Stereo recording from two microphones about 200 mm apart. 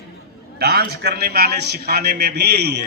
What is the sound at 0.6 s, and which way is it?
A man's voice, 55° right (ahead or behind).